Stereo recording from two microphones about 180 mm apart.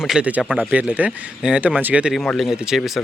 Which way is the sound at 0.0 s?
5° right (ahead or behind).